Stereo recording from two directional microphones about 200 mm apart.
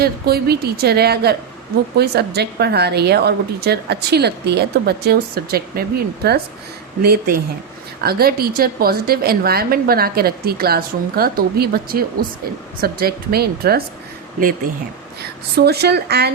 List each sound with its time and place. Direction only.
0.0 s a woman's voice: 50° right (ahead or behind)
15.5 s a woman's voice: 55° right (ahead or behind)